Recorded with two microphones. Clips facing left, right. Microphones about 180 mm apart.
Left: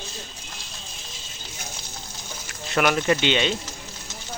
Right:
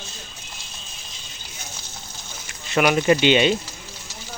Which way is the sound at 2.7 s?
10° right (ahead or behind).